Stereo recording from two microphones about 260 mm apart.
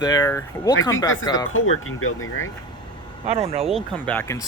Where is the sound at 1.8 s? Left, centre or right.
Left.